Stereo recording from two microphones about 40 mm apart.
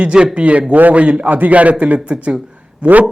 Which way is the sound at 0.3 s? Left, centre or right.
Right.